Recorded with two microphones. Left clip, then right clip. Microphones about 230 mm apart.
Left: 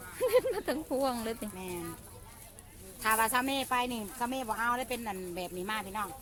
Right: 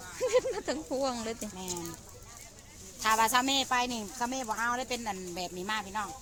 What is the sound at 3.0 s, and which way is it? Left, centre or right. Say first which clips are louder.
Speech: right 3 dB; right.